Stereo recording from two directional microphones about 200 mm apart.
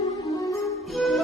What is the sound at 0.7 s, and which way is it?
Music, centre (ahead or behind).